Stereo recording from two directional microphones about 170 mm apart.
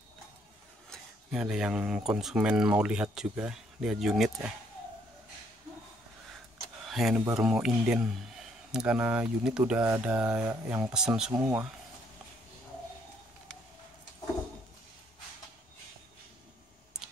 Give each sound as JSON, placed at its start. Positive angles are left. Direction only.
{"t": 0.8, "sound": "speech", "side_deg": 0}
{"t": 6.9, "sound": "a sound", "side_deg": 0}
{"t": 7.3, "sound": "speech", "side_deg": -5}
{"t": 10.9, "sound": "speech", "side_deg": -5}